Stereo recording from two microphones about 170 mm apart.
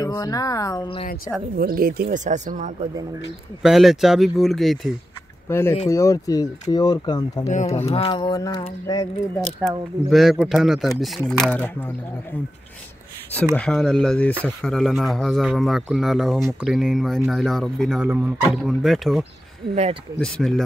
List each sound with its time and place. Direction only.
0.0 s a sound: 20° left (ahead or behind)
1.6 s speech: 60° right (ahead or behind); by 2.7 s 45° right (ahead or behind)
3.6 s speech: centre (ahead or behind)
5.5 s speech: 15° left (ahead or behind)
5.9 s a sound: 20° left (ahead or behind)
7.4 s speech: 40° left (ahead or behind)
8.1 s a sound: 25° left (ahead or behind)
9.6 s speech: centre (ahead or behind)
19.7 s speech: 35° right (ahead or behind)
20.2 s speech: 5° left (ahead or behind)